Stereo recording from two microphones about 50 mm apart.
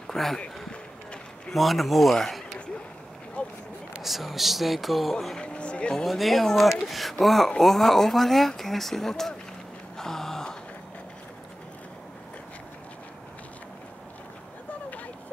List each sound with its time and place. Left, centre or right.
0.0 s speech: centre
1.5 s speech: centre
3.4 s a sound: left
4.0 s speech: centre
5.4 s vehicle: left
6.0 s speech: centre
9.9 s a sound: centre